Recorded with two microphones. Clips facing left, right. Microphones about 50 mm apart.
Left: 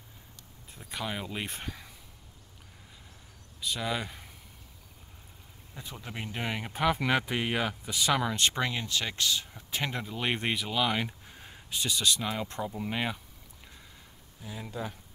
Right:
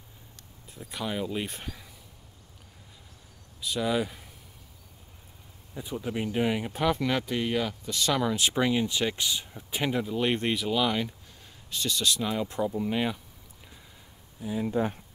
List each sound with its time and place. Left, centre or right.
0.7 s speech: centre
3.6 s speech: centre
5.8 s speech: centre
7.0 s speech: centre
11.0 s a sound: left
11.7 s speech: centre
12.0 s speech: centre
14.4 s speech: centre
14.7 s speech: right